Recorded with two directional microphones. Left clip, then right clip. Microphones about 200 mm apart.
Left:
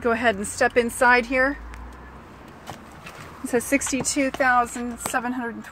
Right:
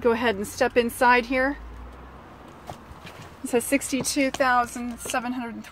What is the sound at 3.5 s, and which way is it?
Speech, centre (ahead or behind).